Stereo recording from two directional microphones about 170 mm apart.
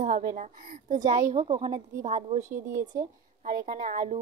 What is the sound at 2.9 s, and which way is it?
Speech, 20° right (ahead or behind).